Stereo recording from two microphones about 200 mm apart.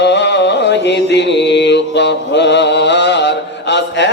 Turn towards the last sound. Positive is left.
turn(degrees=60)  # may be behind; listen again after turning